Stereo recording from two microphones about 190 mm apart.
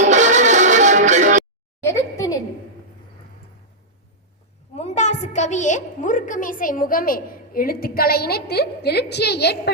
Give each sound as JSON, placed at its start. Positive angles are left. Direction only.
{"t": 0.0, "sound": "music", "side_deg": -40}
{"t": 1.8, "sound": "a sound", "side_deg": 15}
{"t": 4.7, "sound": "a woman's voice", "side_deg": 35}